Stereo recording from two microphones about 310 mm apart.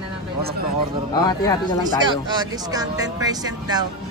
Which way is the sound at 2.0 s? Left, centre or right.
Centre.